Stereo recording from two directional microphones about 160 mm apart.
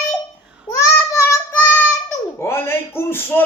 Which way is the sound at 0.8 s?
20° left (ahead or behind).